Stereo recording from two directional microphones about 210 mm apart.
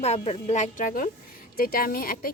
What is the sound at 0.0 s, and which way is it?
A woman's voice, 30° left (ahead or behind).